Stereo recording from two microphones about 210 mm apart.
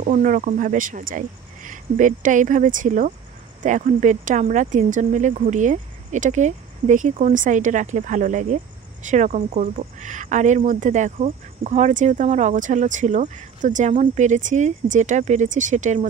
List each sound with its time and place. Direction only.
0.0 s speech: 35° right (ahead or behind)